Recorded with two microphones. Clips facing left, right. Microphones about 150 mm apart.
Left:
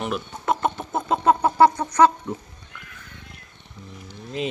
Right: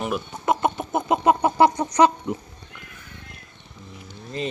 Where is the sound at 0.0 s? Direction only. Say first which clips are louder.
Right 1 dB; 10° right (ahead or behind).